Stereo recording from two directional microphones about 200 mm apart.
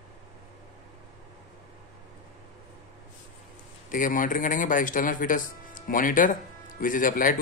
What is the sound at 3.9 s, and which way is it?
Speech, 40° left (ahead or behind).